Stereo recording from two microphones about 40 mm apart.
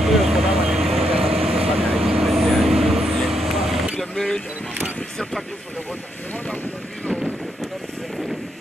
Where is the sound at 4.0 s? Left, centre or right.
Centre.